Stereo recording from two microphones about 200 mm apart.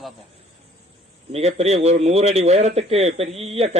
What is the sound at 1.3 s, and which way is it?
Speech, 30° right (ahead or behind).